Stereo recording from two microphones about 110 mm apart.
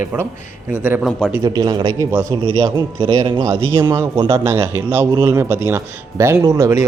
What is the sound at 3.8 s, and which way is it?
A man's voice, 30° right (ahead or behind).